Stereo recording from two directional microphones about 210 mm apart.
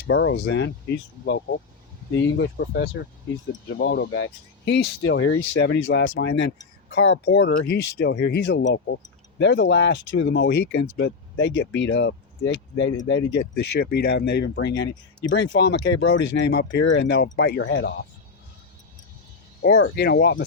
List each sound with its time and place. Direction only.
0.1 s speech: 65° left (ahead or behind)
19.8 s speech: 50° left (ahead or behind)